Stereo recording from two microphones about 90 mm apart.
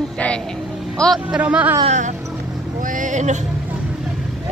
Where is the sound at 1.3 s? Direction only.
10° right (ahead or behind).